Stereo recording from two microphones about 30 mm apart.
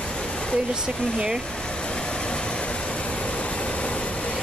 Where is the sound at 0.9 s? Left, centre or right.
Left.